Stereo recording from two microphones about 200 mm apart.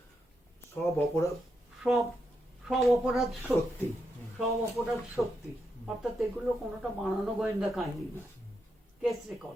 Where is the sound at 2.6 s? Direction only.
Centre (ahead or behind).